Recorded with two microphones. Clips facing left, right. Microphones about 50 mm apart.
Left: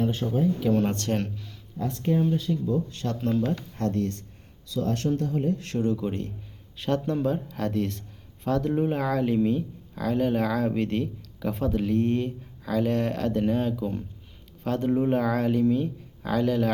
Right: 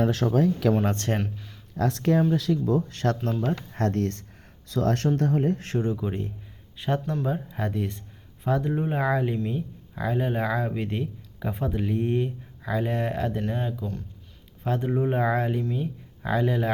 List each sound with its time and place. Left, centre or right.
0.0 s speech: right
0.9 s speech: right
1.7 s speech: right
2.3 s speech: right
2.6 s speech: right
5.8 s speech: centre
7.4 s speech: centre
9.2 s speech: centre
9.9 s speech: right
10.2 s speech: centre
10.4 s speech: centre
10.8 s speech: centre